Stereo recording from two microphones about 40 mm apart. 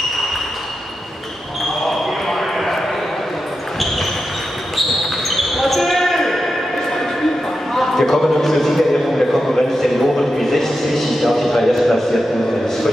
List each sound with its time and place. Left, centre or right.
1.9 s basketball bounce: centre
5.3 s basketball bounce: centre
7.7 s a sound: centre